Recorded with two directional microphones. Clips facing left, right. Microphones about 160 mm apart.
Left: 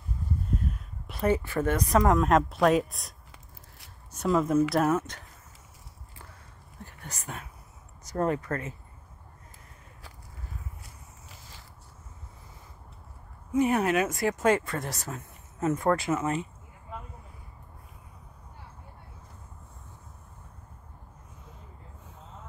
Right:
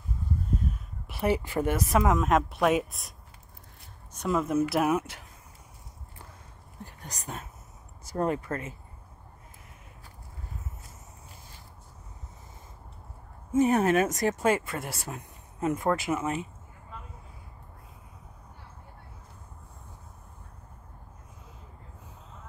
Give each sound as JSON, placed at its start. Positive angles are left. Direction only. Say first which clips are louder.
{"t": 0.6, "sound": "speech", "louder": "right 1 dB", "side_deg": 0}
{"t": 6.8, "sound": "a sound", "louder": "right 1 dB", "side_deg": -15}
{"t": 8.3, "sound": "speech", "louder": "left 1 dB", "side_deg": -25}
{"t": 11.2, "sound": "a sound", "louder": "even", "side_deg": 90}
{"t": 13.5, "sound": "speech", "louder": "right 2 dB", "side_deg": -40}
{"t": 14.4, "sound": "speech", "louder": "left 1 dB", "side_deg": -15}